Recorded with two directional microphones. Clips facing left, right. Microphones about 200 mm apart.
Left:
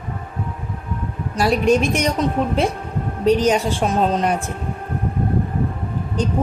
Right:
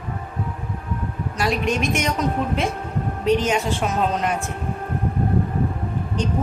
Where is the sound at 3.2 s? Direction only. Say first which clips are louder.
Left 4 dB; 35° left (ahead or behind).